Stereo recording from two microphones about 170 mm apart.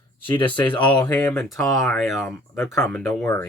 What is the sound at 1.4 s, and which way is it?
Speech, centre (ahead or behind).